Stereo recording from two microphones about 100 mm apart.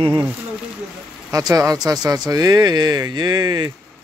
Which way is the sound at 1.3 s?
35° right (ahead or behind).